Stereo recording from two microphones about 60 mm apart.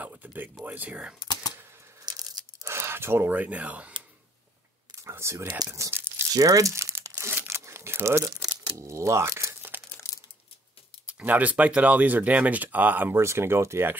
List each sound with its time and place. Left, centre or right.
0.0 s a sound: right
0.7 s speech: right
2.0 s a sound: right
2.7 s a sound: right
3.3 s speech: right
5.1 s speech: right
5.6 s speech: right
5.9 s tearing: right
6.3 s crumpling: right
8.3 s speech: right
9.9 s crumpling: left
11.1 s speech: right
13.1 s speech: right